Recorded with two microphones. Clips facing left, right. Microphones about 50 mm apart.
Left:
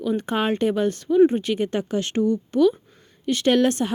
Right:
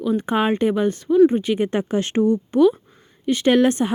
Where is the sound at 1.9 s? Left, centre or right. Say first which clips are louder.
Right 4 dB; right; by 3.9 s centre.